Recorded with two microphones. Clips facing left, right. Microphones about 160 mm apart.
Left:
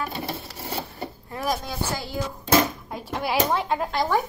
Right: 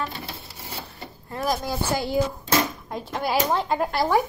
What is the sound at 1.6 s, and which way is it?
Speech, 10° right (ahead or behind).